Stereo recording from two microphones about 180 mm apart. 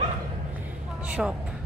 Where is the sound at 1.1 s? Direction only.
5° right (ahead or behind).